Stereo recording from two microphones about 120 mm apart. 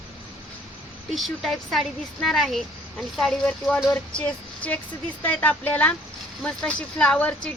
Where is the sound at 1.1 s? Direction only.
Centre (ahead or behind).